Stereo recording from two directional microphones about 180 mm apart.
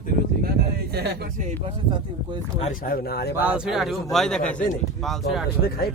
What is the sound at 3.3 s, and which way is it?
A man's voice, 10° right (ahead or behind).